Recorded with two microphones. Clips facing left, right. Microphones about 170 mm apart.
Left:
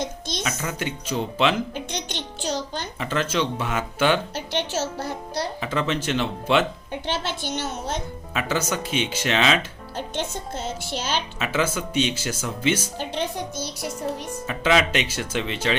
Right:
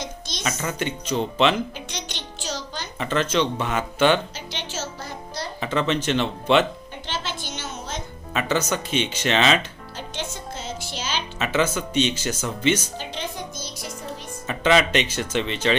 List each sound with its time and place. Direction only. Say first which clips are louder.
0.0 s music: left 5 dB; 55° left (ahead or behind)
0.4 s speech: right 3 dB; 5° left (ahead or behind)
1.7 s music: left 4 dB; 50° left (ahead or behind)
3.0 s speech: right 3 dB; 5° left (ahead or behind)
4.5 s music: left 7 dB; 65° left (ahead or behind)
5.5 s speech: right 5 dB; 5° left (ahead or behind)
7.4 s a sound: left 5 dB; 60° left (ahead or behind)
8.3 s speech: right 2 dB; 5° left (ahead or behind)
10.0 s music: left 4 dB; 55° left (ahead or behind)
11.3 s speech: right 4 dB; 5° left (ahead or behind)
13.0 s music: left 4 dB; 60° left (ahead or behind)
14.4 s speech: right 2 dB; 5° left (ahead or behind)